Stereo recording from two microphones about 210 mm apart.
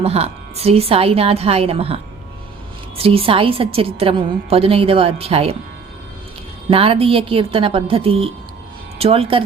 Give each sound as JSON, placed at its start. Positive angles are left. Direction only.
{"t": 0.0, "sound": "a woman's voice", "side_deg": -30}
{"t": 3.0, "sound": "a woman's voice", "side_deg": -25}
{"t": 6.7, "sound": "a woman's voice", "side_deg": -25}